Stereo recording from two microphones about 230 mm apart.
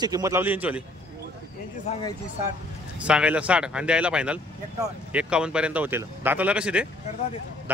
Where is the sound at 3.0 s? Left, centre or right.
Centre.